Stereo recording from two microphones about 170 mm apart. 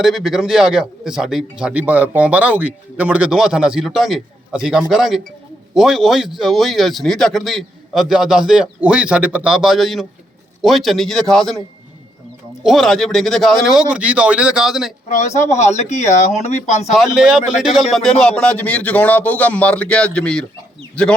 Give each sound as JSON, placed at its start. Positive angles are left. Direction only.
{"t": 0.0, "sound": "a man's voice", "side_deg": 0}
{"t": 12.6, "sound": "a man's voice", "side_deg": 0}
{"t": 15.1, "sound": "speech", "side_deg": 40}
{"t": 16.9, "sound": "a man's voice", "side_deg": -5}